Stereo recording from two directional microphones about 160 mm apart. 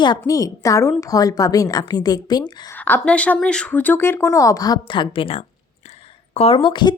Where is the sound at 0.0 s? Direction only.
25° left (ahead or behind).